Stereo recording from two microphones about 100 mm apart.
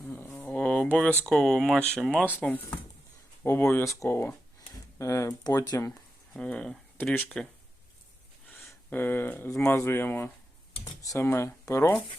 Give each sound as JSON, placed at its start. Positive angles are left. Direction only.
{"t": 0.0, "sound": "a sound", "side_deg": 20}
{"t": 1.3, "sound": "speech", "side_deg": 5}
{"t": 3.4, "sound": "speech", "side_deg": 25}
{"t": 6.3, "sound": "speech", "side_deg": 10}
{"t": 6.9, "sound": "speech", "side_deg": 20}
{"t": 8.4, "sound": "speech", "side_deg": 20}
{"t": 10.8, "sound": "speech", "side_deg": 35}